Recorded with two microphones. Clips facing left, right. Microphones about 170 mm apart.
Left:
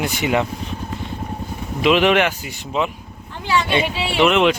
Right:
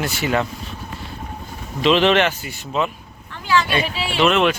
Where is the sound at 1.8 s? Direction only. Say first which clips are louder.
Even; 10° left (ahead or behind).